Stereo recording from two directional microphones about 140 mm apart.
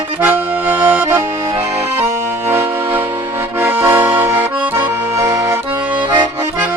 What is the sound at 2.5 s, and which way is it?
Music, 15° right (ahead or behind).